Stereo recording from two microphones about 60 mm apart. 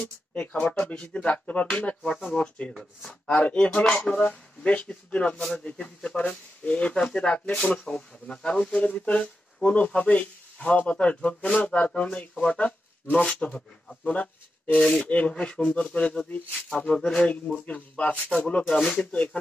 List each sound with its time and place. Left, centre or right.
0.0 s speech: left
2.7 s speech: centre
3.3 s speech: left
14.8 s speech: centre
15.0 s speech: left
16.5 s speech: centre
16.8 s speech: centre